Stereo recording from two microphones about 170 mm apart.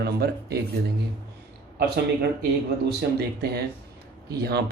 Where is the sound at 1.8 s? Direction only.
75° right (ahead or behind).